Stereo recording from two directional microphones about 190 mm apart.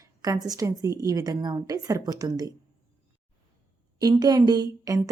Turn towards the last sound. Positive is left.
turn(degrees=-20)  # may be behind; listen again after turning